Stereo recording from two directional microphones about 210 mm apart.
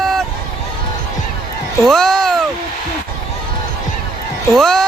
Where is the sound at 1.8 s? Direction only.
Centre (ahead or behind).